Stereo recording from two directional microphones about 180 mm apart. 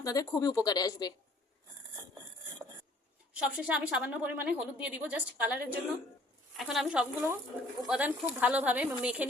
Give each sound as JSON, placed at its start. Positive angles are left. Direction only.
{"t": 0.0, "sound": "speech", "side_deg": 20}
{"t": 3.3, "sound": "a woman's voice", "side_deg": -5}